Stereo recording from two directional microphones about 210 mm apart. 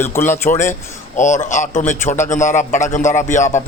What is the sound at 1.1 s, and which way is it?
A man's voice, 35° left (ahead or behind).